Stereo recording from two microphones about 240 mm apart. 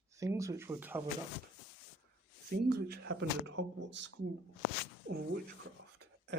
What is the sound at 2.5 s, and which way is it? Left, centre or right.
Speech, right.